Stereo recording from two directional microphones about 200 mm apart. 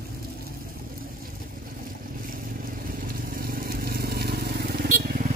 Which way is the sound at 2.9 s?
45° right (ahead or behind).